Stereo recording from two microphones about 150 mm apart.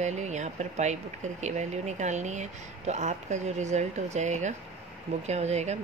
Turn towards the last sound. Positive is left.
turn(degrees=-50)  # may be behind; listen again after turning